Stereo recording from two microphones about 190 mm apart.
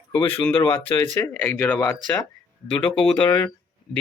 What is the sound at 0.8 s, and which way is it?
Speech, 30° left (ahead or behind).